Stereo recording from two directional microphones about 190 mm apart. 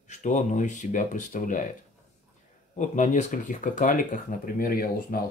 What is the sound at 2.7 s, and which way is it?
Speech, 40° left (ahead or behind).